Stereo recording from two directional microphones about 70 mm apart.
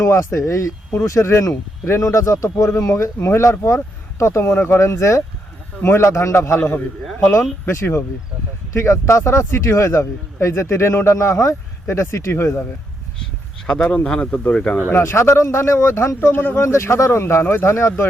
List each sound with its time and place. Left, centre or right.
0.0 s a man's voice: left
6.6 s a man's voice: left
7.7 s a man's voice: left
13.7 s speech: centre
14.8 s speech: left